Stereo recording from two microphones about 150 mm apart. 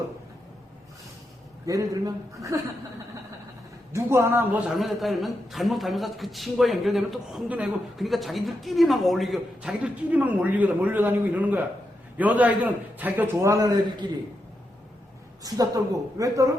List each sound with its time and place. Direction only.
1.6 s a man's voice: 25° right (ahead or behind)
3.9 s a man's voice: 20° right (ahead or behind)
4.7 s a man's voice: centre (ahead or behind); by 14.1 s 25° right (ahead or behind)
15.4 s a man's voice: 25° right (ahead or behind)